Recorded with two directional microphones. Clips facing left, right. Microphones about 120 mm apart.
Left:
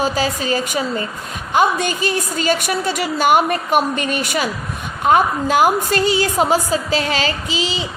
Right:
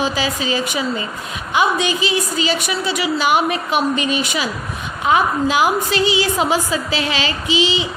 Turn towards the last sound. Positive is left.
turn(degrees=40)  # may be behind; listen again after turning